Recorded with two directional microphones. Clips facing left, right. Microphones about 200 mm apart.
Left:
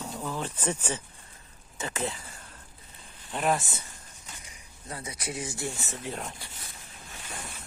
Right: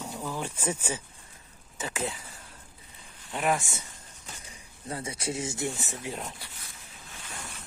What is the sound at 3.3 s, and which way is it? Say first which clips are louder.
Speech: even; centre (ahead or behind).